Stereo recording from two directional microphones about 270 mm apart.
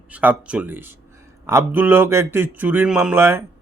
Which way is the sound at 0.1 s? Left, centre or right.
Centre.